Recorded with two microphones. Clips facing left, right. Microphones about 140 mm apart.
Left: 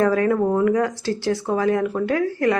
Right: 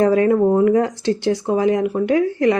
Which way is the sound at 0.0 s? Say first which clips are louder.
Right 4 dB; 20° right (ahead or behind).